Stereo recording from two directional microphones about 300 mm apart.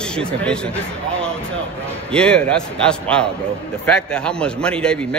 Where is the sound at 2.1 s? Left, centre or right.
Centre.